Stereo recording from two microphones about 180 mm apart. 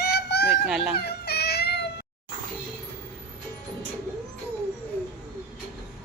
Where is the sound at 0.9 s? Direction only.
65° left (ahead or behind).